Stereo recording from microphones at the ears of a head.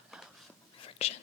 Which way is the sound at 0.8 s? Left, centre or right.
Left.